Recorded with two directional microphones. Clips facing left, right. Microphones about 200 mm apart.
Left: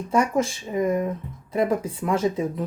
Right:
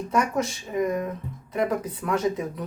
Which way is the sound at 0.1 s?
30° left (ahead or behind).